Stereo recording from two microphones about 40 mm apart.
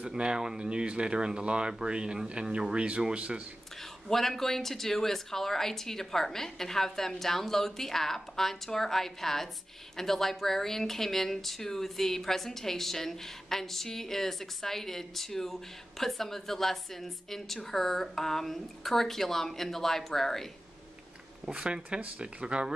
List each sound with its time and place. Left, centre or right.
0.2 s speech: right
4.1 s speech: centre
21.5 s speech: centre